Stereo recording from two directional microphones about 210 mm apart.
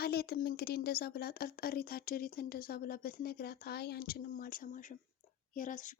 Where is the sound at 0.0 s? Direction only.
45° left (ahead or behind).